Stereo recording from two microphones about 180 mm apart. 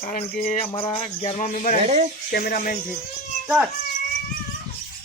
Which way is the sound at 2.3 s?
55° left (ahead or behind).